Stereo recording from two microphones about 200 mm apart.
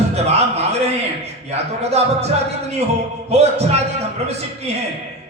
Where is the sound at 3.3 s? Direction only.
30° right (ahead or behind).